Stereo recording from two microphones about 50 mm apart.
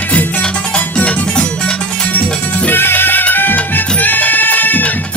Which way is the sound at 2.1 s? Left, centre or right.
Left.